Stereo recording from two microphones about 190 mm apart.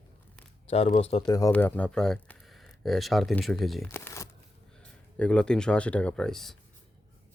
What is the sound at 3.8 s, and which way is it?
Crumpling, 15° left (ahead or behind).